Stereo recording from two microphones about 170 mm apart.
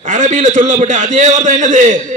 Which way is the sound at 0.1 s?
45° right (ahead or behind).